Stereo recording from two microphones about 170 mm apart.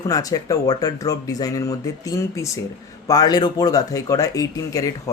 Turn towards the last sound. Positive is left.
turn(degrees=20)  # may be behind; listen again after turning